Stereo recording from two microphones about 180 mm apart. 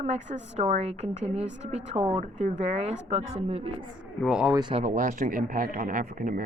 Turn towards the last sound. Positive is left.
turn(degrees=-50)  # may be behind; listen again after turning